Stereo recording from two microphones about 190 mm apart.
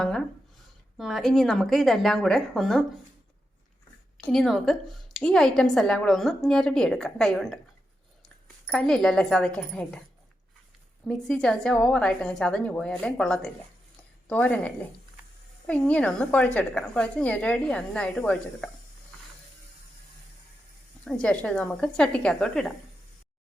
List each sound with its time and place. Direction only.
0.9 s a woman's voice: centre (ahead or behind)
4.3 s a woman's voice: centre (ahead or behind)
8.6 s a woman's voice: 5° left (ahead or behind)
11.1 s a woman's voice: 5° left (ahead or behind)
21.0 s a woman's voice: 5° left (ahead or behind)